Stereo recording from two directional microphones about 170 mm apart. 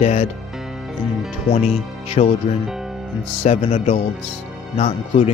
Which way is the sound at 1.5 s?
35° left (ahead or behind).